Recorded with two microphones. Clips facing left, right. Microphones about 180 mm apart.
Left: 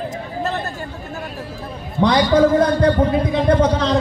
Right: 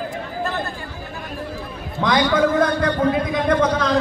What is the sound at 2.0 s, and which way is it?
A man's voice, 35° left (ahead or behind).